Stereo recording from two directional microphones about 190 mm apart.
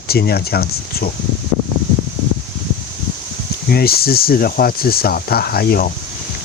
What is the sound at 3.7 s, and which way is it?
Speech, 55° left (ahead or behind).